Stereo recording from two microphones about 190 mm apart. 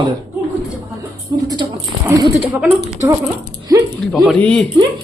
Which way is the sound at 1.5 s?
25° right (ahead or behind).